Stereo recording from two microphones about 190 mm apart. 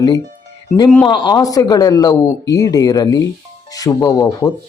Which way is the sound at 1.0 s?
25° left (ahead or behind).